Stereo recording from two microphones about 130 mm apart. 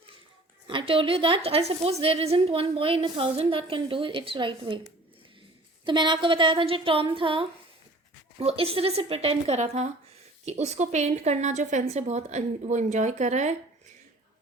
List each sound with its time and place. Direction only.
0.7 s a woman's voice: 40° right (ahead or behind)
5.8 s a woman's voice: 35° right (ahead or behind); by 13.6 s 60° right (ahead or behind)